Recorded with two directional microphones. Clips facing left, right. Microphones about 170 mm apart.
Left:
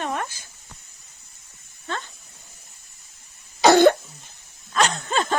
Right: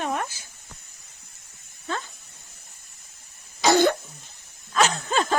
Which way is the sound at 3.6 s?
65° left (ahead or behind).